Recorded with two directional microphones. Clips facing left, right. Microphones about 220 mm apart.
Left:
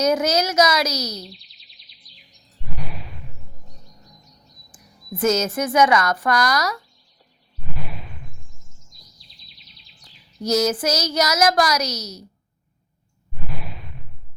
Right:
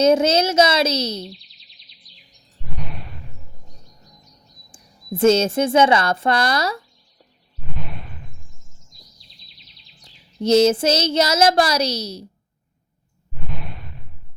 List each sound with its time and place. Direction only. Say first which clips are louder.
0.0 s speech: right 4 dB; 25° right (ahead or behind)
1.3 s bird vocalization: right 4 dB; centre (ahead or behind)
3.7 s chirp: left 1 dB; centre (ahead or behind)
4.7 s speech: right 5 dB; 25° right (ahead or behind)
7.8 s a sound: right 1 dB; centre (ahead or behind)
8.8 s bird vocalization: right 1 dB; centre (ahead or behind)
10.0 s bird vocalization: right 3 dB; 25° right (ahead or behind)
10.4 s speech: right 6 dB; 30° right (ahead or behind)
13.5 s a sound: right 1 dB; centre (ahead or behind)